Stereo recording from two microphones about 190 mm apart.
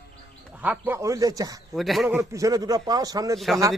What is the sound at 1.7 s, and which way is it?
Speech, centre (ahead or behind).